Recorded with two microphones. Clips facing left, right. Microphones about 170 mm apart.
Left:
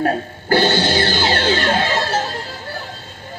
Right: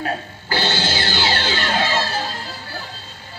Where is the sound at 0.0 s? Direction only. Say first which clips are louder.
Left 6 dB; 50° left (ahead or behind).